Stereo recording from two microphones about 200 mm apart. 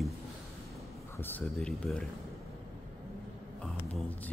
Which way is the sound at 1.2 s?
10° left (ahead or behind).